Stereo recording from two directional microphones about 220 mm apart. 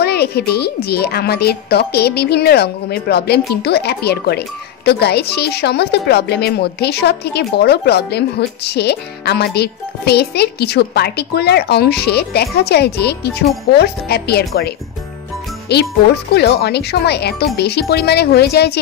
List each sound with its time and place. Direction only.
0.0 s a woman's voice: 45° left (ahead or behind)
15.7 s a woman's voice: 50° left (ahead or behind)